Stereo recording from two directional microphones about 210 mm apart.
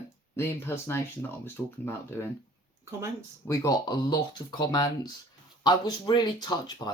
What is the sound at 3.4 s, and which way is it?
Speech, 15° left (ahead or behind).